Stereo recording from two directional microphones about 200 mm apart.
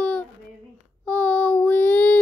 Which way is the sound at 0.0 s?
5° left (ahead or behind).